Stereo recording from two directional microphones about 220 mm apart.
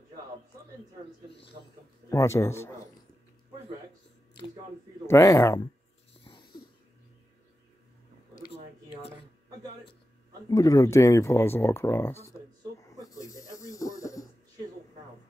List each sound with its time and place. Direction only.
2.0 s speech: 15° left (ahead or behind)
5.0 s speech: 15° left (ahead or behind)
6.2 s wheeze: 20° left (ahead or behind)
10.5 s speech: 15° left (ahead or behind)
13.0 s snake: 15° left (ahead or behind)